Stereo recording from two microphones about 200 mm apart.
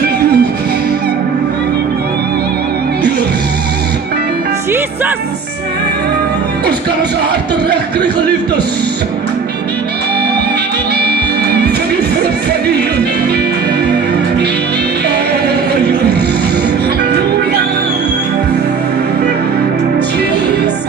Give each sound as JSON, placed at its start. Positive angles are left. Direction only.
{"t": 0.0, "sound": "music", "side_deg": -55}